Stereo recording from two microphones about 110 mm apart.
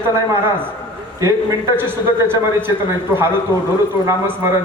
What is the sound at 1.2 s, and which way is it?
A man's voice, 30° right (ahead or behind).